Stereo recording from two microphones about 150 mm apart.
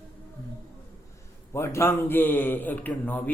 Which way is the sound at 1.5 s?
20° left (ahead or behind).